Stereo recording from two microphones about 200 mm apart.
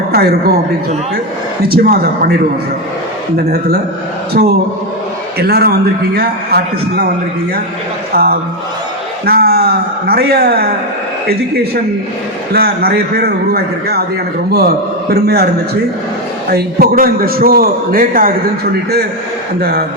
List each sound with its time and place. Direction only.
0.1 s a man's voice: 50° right (ahead or behind)
1.6 s a man's voice: 50° right (ahead or behind)
3.3 s a man's voice: 50° right (ahead or behind)
8.1 s a man's voice: 50° right (ahead or behind)
15.1 s a man's voice: 55° right (ahead or behind)
16.5 s a man's voice: 50° right (ahead or behind)